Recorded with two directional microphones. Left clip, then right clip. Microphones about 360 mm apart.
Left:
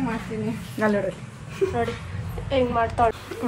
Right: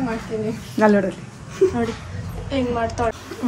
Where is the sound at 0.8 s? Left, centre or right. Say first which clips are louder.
Right 7 dB; right.